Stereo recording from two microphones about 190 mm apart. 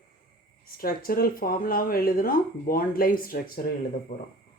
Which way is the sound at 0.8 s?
50° left (ahead or behind).